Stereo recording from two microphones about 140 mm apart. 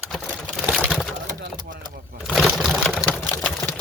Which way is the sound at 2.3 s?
Centre (ahead or behind).